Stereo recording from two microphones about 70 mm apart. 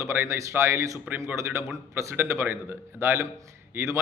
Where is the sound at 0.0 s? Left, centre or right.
Right.